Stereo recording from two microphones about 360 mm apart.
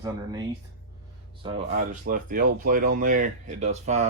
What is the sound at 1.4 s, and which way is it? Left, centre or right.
Speech, centre.